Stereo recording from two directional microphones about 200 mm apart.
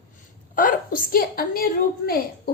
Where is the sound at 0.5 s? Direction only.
45° left (ahead or behind).